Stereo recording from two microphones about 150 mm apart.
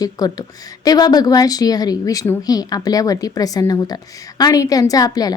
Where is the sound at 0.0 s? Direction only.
25° left (ahead or behind).